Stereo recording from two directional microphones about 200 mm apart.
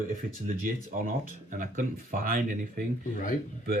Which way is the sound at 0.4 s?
45° right (ahead or behind).